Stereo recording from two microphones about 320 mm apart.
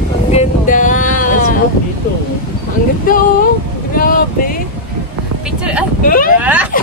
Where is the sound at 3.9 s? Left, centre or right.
Left.